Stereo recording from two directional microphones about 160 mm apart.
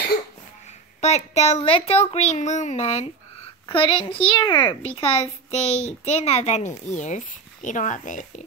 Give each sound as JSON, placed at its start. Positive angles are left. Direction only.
{"t": 1.0, "sound": "a woman's voice", "side_deg": 45}